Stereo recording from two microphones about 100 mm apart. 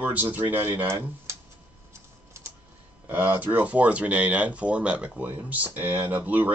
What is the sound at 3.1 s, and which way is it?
Speech, 20° right (ahead or behind).